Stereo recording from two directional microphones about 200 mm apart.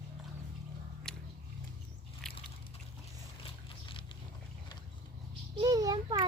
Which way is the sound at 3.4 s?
25° left (ahead or behind).